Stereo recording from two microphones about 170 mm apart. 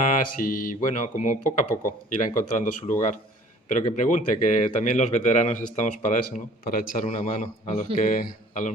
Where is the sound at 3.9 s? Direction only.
45° left (ahead or behind).